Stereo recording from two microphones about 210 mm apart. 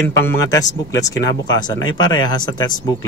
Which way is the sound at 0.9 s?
15° left (ahead or behind).